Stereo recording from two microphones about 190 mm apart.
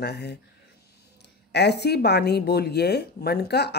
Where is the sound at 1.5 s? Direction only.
60° left (ahead or behind).